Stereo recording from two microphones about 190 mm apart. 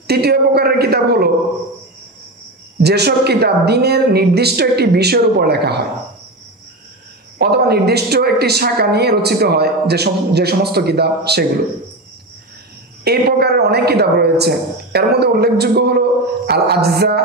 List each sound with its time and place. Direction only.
0.0 s speech: 55° right (ahead or behind)
2.8 s speech: 60° right (ahead or behind)
7.3 s speech: 60° right (ahead or behind)
13.0 s speech: 55° right (ahead or behind)